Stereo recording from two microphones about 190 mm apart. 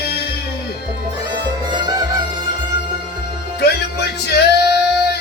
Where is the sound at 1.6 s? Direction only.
20° right (ahead or behind).